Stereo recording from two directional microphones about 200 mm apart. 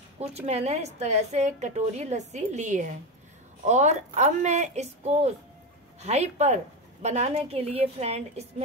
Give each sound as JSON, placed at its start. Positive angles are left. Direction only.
{"t": 0.2, "sound": "a woman's voice", "side_deg": -30}